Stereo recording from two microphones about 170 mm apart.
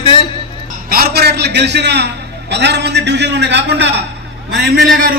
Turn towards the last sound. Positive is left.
turn(degrees=-65)  # may be behind; listen again after turning